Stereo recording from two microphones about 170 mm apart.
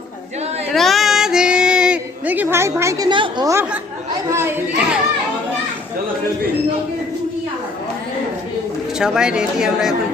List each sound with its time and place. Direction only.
0.7 s child singing: centre (ahead or behind); by 3.1 s 15° right (ahead or behind)
3.1 s a woman's voice: 25° right (ahead or behind); by 4.9 s 10° right (ahead or behind)
9.0 s speech: 5° right (ahead or behind)